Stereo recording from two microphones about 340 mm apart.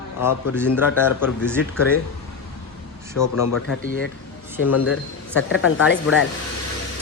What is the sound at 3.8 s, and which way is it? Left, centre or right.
Speech, left.